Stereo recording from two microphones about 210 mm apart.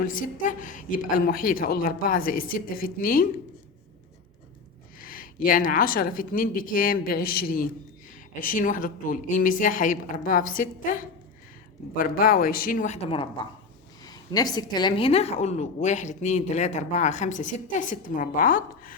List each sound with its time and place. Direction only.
0.0 s a woman's voice: 40° left (ahead or behind)
4.9 s a woman's voice: 40° left (ahead or behind)